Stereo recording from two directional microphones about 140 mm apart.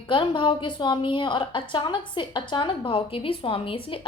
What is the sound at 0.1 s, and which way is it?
A woman's voice, 35° left (ahead or behind).